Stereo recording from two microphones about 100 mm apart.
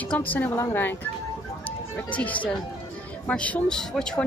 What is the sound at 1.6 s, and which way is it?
Music, 15° left (ahead or behind).